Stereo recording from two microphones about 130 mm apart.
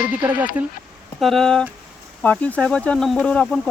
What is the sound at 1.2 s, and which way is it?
Speech, centre (ahead or behind).